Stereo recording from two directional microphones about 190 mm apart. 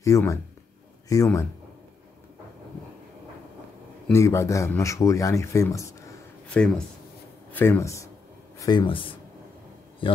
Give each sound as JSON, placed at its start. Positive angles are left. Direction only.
{"t": 0.0, "sound": "speech", "side_deg": 15}
{"t": 4.1, "sound": "a man's voice", "side_deg": 15}